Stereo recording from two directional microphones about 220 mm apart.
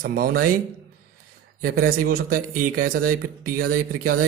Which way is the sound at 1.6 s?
40° right (ahead or behind).